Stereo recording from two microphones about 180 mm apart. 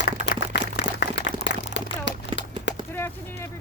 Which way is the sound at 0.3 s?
85° left.